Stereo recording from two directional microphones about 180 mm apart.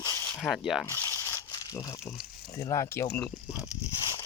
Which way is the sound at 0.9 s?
15° left (ahead or behind).